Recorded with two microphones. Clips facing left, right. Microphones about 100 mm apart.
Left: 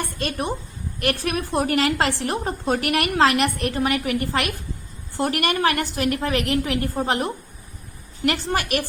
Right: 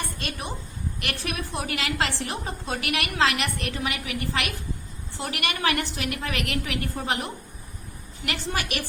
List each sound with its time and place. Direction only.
0.2 s a woman's voice: 45° left (ahead or behind)
8.2 s a woman's voice: 45° left (ahead or behind)